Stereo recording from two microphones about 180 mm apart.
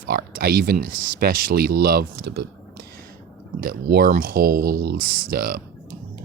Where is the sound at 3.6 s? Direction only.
55° right (ahead or behind).